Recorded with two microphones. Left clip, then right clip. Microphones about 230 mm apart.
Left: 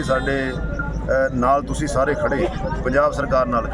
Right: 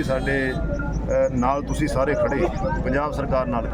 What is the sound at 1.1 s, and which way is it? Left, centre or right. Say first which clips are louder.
Speech: left 3 dB; centre.